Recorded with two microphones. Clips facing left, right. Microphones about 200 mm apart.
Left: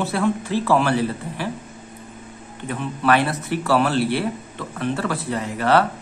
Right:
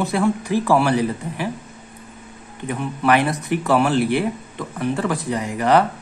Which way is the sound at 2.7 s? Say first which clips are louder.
Right 1 dB; 15° right (ahead or behind).